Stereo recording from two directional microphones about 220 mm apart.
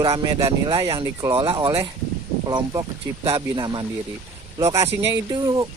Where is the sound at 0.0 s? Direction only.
20° right (ahead or behind).